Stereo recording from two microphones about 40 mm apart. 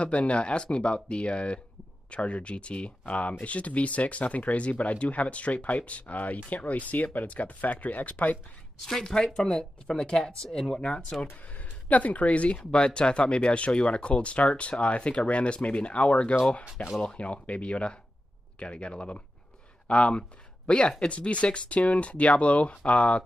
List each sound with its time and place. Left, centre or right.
0.0 s speech: left
8.8 s speech: centre
11.5 s speech: left